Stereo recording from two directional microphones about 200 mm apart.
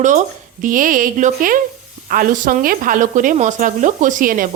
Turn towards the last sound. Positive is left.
turn(degrees=-45)  # may be behind; listen again after turning